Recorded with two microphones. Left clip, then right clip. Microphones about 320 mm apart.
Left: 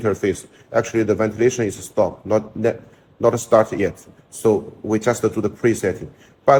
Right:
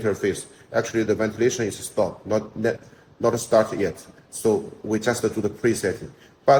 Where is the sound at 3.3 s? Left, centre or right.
Left.